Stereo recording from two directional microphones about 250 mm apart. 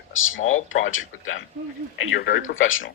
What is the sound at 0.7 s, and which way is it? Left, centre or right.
Speech, left.